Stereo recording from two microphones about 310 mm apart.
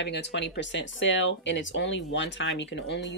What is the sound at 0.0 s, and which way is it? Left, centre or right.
Speech, left.